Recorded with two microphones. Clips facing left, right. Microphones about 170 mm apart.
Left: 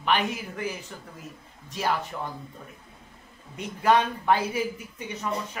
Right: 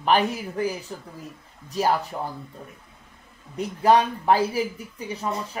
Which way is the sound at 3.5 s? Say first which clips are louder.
Right 3 dB; 35° right (ahead or behind).